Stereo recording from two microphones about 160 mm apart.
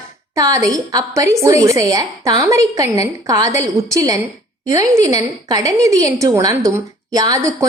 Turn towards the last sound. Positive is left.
turn(degrees=-20)  # may be behind; listen again after turning